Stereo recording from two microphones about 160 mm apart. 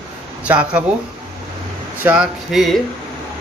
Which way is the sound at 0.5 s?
5° right (ahead or behind).